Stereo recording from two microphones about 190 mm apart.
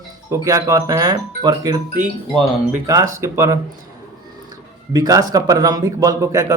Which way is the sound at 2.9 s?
15° right (ahead or behind).